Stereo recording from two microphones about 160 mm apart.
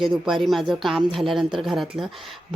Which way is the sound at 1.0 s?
35° right (ahead or behind).